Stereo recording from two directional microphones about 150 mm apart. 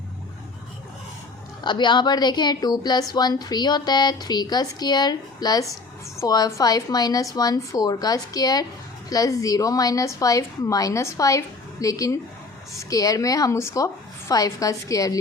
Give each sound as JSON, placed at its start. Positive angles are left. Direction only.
{"t": 1.6, "sound": "a woman's voice", "side_deg": 30}